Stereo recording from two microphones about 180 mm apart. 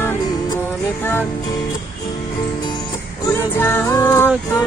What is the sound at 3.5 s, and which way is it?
Music, 10° left (ahead or behind).